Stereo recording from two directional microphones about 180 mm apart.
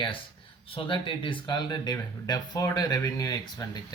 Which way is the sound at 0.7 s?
30° left (ahead or behind).